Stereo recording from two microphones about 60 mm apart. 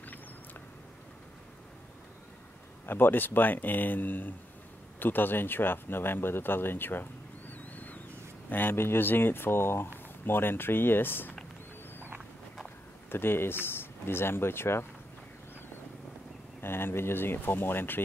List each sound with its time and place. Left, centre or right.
2.9 s speech: left
13.1 s speech: left
16.6 s speech: left